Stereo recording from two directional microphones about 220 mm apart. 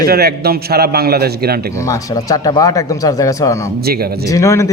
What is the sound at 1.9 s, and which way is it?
Speech, 15° left (ahead or behind).